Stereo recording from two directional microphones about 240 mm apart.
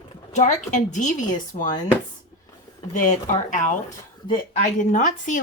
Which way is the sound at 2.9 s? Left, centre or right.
Left.